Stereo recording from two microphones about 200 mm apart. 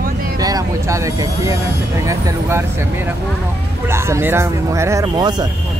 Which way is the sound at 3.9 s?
10° right (ahead or behind).